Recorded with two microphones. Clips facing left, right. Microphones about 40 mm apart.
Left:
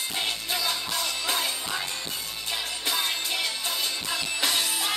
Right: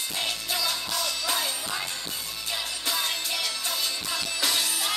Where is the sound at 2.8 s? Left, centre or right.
Left.